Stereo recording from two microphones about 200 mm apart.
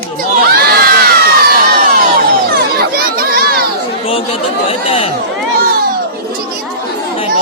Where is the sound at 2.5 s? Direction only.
50° right (ahead or behind).